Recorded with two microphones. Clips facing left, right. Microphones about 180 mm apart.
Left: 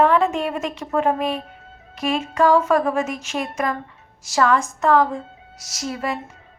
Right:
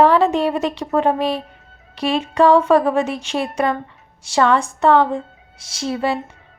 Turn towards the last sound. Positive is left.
turn(degrees=-30)  # may be behind; listen again after turning